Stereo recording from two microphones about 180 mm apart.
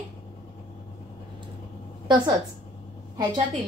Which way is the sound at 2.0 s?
25° right (ahead or behind).